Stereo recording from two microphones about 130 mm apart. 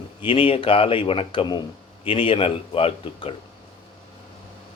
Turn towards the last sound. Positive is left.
turn(degrees=45)  # may be behind; listen again after turning